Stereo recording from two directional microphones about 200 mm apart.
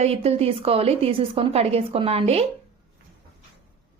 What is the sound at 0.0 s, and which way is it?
A woman's voice, 30° right (ahead or behind).